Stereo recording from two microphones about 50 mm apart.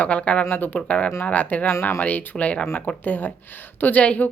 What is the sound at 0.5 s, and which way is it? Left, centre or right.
Speech, left.